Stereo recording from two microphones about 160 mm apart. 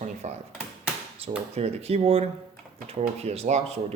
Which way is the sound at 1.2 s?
35° right (ahead or behind).